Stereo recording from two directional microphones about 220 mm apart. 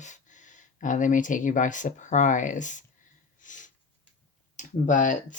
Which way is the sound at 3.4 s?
35° left (ahead or behind).